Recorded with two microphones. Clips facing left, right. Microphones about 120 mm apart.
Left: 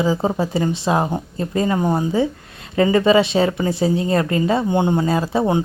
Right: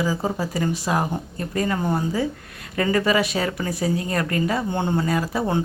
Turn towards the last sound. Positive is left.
turn(degrees=25)  # may be behind; listen again after turning